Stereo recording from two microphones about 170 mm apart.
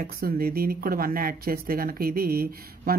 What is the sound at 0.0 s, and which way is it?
Speech, 60° right (ahead or behind).